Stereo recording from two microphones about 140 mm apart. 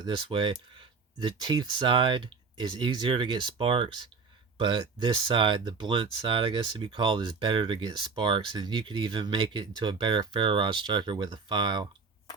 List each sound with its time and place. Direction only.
0.0 s speech: 35° right (ahead or behind)